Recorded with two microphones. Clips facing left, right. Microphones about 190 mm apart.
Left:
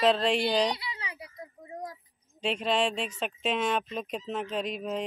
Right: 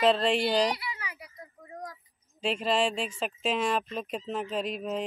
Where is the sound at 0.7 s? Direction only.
25° left (ahead or behind).